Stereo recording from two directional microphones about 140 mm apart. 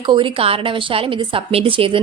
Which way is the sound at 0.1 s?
40° right (ahead or behind).